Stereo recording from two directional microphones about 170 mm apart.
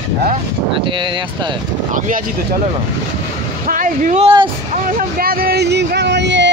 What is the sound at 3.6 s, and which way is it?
Speech, 50° right (ahead or behind).